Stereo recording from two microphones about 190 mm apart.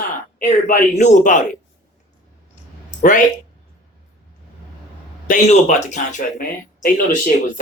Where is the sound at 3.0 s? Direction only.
40° left (ahead or behind).